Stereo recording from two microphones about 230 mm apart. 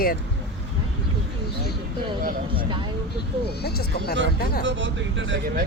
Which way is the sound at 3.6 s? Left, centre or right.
Left.